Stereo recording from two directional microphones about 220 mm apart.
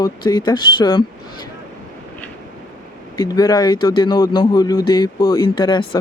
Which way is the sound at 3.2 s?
20° left (ahead or behind).